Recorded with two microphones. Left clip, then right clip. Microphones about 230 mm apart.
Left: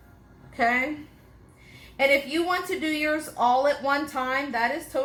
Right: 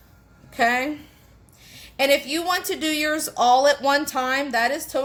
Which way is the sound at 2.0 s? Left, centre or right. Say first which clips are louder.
Right 2 dB; right.